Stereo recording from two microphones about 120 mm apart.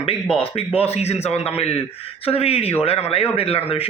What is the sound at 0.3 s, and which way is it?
A man's voice, 55° left (ahead or behind).